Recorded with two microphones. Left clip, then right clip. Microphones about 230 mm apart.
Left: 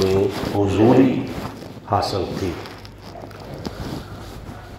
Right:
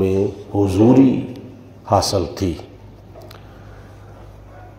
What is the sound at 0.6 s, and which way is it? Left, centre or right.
Speech, right.